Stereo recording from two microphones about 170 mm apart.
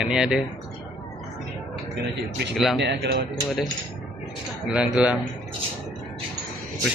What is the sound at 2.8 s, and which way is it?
Speech, 85° right.